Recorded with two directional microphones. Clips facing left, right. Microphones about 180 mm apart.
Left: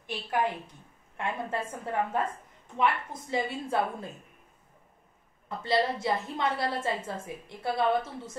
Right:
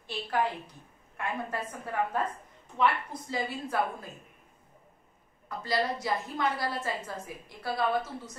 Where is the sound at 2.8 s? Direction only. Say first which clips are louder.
Even; 25° left (ahead or behind).